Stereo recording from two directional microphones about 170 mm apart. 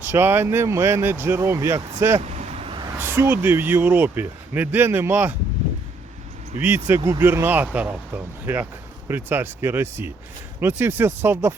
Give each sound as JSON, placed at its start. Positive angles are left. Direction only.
{"t": 0.0, "sound": "speech", "side_deg": -15}
{"t": 2.2, "sound": "vehicle", "side_deg": -40}
{"t": 3.0, "sound": "speech", "side_deg": -10}
{"t": 6.6, "sound": "speech", "side_deg": -10}
{"t": 9.0, "sound": "speech", "side_deg": -10}